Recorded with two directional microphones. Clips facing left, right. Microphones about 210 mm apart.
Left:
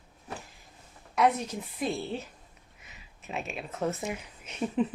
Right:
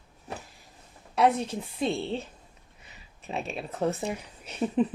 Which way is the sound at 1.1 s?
30° right (ahead or behind).